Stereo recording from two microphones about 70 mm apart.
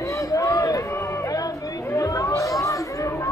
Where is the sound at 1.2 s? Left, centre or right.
Left.